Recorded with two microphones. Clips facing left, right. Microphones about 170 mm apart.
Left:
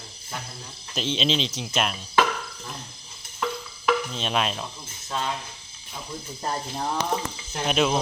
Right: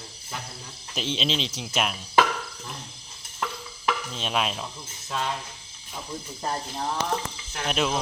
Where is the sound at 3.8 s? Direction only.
Centre (ahead or behind).